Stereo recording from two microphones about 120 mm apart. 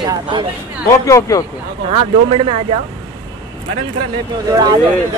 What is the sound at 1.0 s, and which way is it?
Speech, 25° left (ahead or behind).